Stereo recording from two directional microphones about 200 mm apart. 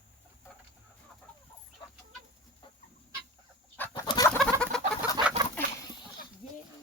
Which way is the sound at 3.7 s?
15° left (ahead or behind).